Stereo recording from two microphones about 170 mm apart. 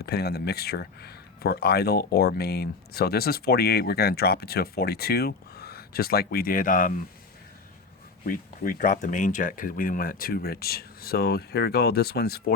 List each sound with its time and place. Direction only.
0.0 s speech: 70° left (ahead or behind); by 7.0 s 55° left (ahead or behind)
8.2 s speech: 55° left (ahead or behind)